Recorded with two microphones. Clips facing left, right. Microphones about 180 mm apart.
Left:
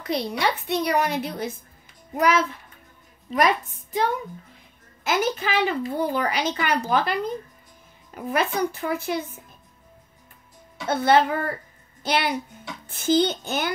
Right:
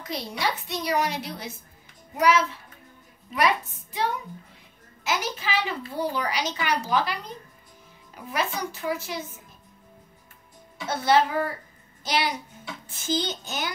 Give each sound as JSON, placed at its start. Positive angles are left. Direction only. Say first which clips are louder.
{"t": 0.0, "sound": "a woman's voice", "louder": "left 5 dB", "side_deg": 65}
{"t": 10.9, "sound": "a woman's voice", "louder": "left 3 dB", "side_deg": 55}